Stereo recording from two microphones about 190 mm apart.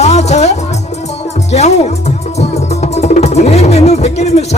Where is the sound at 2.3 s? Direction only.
35° left (ahead or behind).